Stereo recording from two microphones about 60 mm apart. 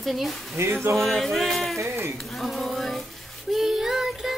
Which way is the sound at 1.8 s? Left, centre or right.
Right.